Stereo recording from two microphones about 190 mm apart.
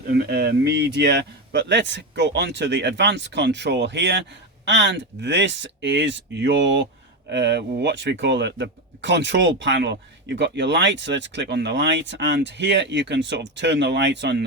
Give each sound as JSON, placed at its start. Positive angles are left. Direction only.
{"t": 0.1, "sound": "speech", "side_deg": -55}